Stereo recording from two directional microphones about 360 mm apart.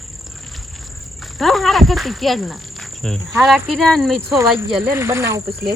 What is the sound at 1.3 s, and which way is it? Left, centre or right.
Cricket, centre.